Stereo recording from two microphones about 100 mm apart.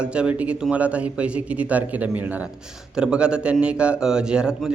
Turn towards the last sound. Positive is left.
turn(degrees=-5)  # may be behind; listen again after turning